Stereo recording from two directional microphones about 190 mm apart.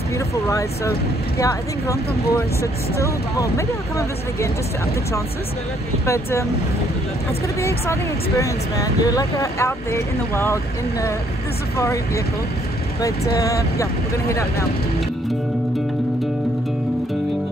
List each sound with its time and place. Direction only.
0.5 s speech: 15° left (ahead or behind)
6.0 s speech: 15° left (ahead or behind)
7.6 s speech: 15° left (ahead or behind)
13.0 s speech: 20° left (ahead or behind)